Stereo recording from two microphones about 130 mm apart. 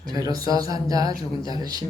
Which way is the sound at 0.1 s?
30° right (ahead or behind).